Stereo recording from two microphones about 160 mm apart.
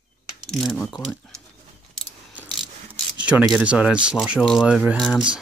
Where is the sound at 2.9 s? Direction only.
10° right (ahead or behind).